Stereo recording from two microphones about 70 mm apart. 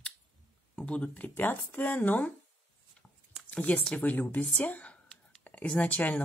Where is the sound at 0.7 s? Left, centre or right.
Centre.